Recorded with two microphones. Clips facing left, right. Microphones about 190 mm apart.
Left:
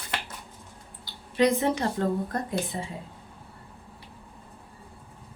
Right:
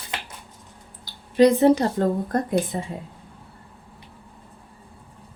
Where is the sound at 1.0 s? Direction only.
35° right (ahead or behind).